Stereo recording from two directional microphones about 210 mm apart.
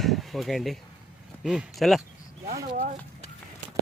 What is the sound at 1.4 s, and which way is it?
Speech, 5° right (ahead or behind).